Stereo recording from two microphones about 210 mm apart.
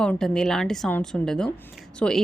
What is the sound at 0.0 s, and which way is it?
A woman's voice, 5° left (ahead or behind).